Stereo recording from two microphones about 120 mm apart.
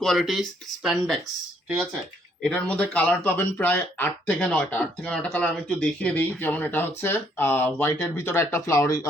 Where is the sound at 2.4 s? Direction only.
10° left (ahead or behind).